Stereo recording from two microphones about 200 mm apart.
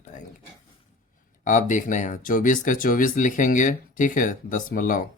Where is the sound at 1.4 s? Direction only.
40° left (ahead or behind).